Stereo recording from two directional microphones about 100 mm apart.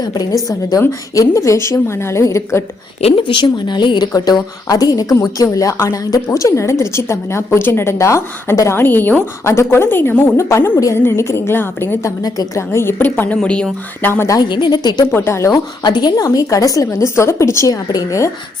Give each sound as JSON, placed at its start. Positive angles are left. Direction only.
{"t": 0.0, "sound": "a woman's voice", "side_deg": 40}
{"t": 3.0, "sound": "a woman's voice", "side_deg": 65}
{"t": 12.0, "sound": "speech", "side_deg": 35}
{"t": 12.7, "sound": "a woman's voice", "side_deg": 25}
{"t": 14.0, "sound": "a woman's voice", "side_deg": 20}
{"t": 14.3, "sound": "a woman's voice", "side_deg": 45}
{"t": 15.0, "sound": "a woman's voice", "side_deg": 25}
{"t": 15.5, "sound": "speech", "side_deg": 45}